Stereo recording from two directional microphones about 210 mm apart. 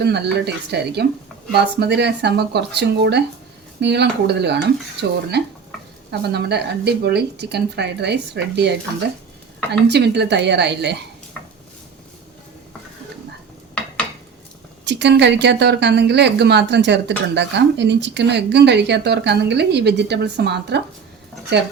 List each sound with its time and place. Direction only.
0.0 s speech: 55° right (ahead or behind)
9.9 s speech: 55° right (ahead or behind)
14.8 s speech: 55° right (ahead or behind)